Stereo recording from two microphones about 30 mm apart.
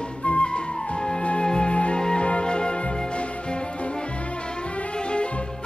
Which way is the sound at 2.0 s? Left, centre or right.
Left.